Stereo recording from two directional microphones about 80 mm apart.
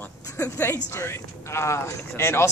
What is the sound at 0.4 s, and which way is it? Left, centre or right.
A man's voice, left.